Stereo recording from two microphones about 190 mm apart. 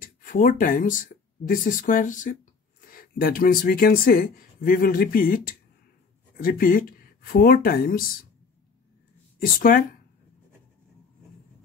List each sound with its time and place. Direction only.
0.0 s speech: 45° left (ahead or behind)
9.4 s speech: 50° left (ahead or behind)